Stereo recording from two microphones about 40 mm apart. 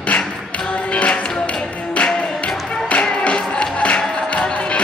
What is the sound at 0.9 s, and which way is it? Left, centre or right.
Music, left.